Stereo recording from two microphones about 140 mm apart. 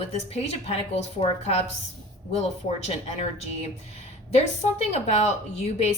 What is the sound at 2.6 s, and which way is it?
A woman's voice, 50° left (ahead or behind).